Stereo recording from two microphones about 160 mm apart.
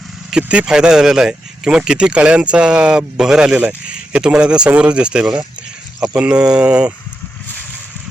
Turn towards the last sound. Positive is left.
turn(degrees=-5)  # may be behind; listen again after turning